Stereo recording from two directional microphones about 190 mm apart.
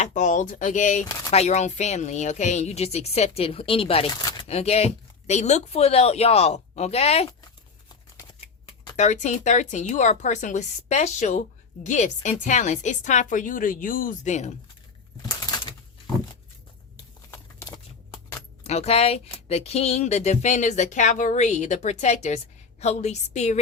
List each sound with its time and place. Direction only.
0.0 s a woman's voice: 40° left (ahead or behind)
8.1 s shuffling cards: 15° left (ahead or behind)
9.0 s a woman's voice: 40° left (ahead or behind)
15.3 s a sound: 20° left (ahead or behind)
17.3 s keys jangling: 20° left (ahead or behind)
18.6 s a woman's voice: 35° left (ahead or behind)